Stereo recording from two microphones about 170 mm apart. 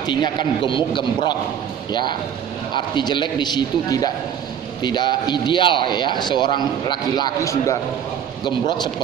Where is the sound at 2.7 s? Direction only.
25° left (ahead or behind).